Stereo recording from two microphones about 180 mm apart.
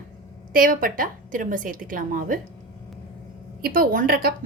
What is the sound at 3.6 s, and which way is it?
Speech, 55° right (ahead or behind).